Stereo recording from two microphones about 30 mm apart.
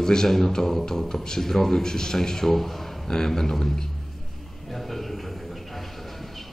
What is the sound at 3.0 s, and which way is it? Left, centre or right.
Speech, centre.